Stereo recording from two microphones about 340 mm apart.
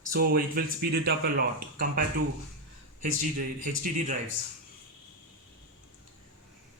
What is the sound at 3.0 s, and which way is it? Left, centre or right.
Speech, right.